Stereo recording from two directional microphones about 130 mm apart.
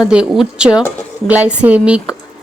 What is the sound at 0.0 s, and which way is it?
Speech, 5° right (ahead or behind).